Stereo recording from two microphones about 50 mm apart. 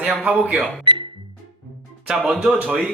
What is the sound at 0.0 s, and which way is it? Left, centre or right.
Speech, right.